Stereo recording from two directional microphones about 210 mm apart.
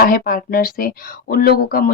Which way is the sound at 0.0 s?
45° left (ahead or behind).